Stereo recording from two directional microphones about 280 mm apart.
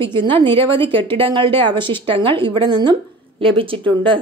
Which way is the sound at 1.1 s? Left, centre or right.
Centre.